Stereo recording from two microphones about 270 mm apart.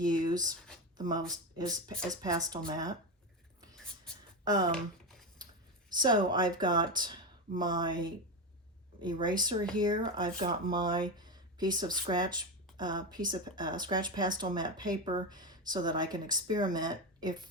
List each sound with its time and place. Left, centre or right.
0.0 s speech: centre
4.4 s speech: centre
6.0 s speech: centre